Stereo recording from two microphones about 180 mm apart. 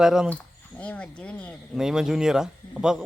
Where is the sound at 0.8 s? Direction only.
5° left (ahead or behind).